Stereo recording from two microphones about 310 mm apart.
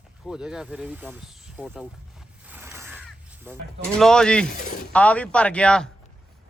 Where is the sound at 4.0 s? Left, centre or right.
Centre.